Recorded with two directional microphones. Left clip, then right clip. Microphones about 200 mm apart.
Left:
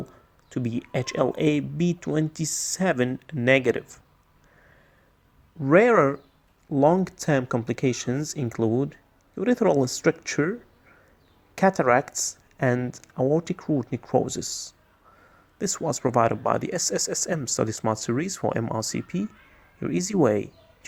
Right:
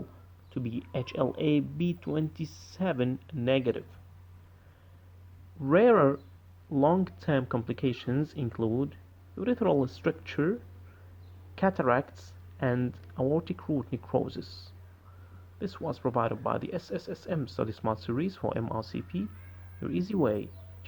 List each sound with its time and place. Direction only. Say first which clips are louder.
0.5 s speech: left 7 dB; 35° left (ahead or behind)
5.6 s speech: left 4 dB; 40° left (ahead or behind)
15.5 s speech: left 8 dB; 45° left (ahead or behind)